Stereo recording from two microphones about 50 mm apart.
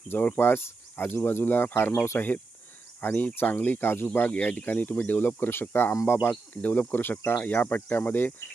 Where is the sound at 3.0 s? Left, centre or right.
Left.